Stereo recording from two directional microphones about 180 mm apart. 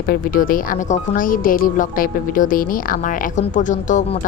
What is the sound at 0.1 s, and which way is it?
Speech, 50° left (ahead or behind).